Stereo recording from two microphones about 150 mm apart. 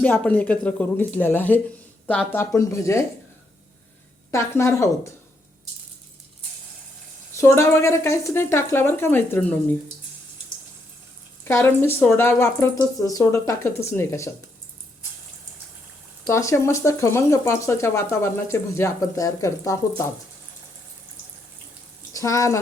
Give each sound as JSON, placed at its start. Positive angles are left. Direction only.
{"t": 0.0, "sound": "speech", "side_deg": 10}
{"t": 4.3, "sound": "speech", "side_deg": 20}
{"t": 7.3, "sound": "speech", "side_deg": 20}
{"t": 11.4, "sound": "speech", "side_deg": 15}
{"t": 16.2, "sound": "speech", "side_deg": 20}
{"t": 22.1, "sound": "speech", "side_deg": 20}